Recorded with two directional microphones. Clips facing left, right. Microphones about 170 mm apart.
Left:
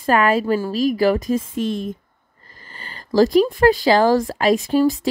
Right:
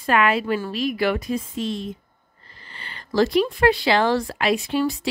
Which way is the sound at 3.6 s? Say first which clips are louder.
Left 3 dB; 40° left (ahead or behind).